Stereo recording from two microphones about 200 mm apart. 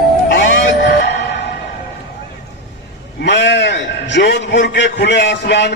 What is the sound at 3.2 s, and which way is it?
A man's voice, 60° left (ahead or behind).